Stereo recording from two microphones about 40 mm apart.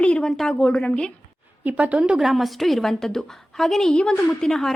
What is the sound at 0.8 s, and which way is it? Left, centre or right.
Speech, left.